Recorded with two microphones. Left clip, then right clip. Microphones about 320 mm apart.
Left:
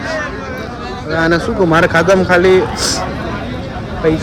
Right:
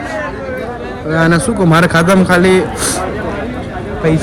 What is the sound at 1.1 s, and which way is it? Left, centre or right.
A man's voice, right.